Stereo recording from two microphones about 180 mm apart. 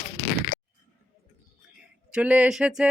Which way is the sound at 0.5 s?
55° left (ahead or behind).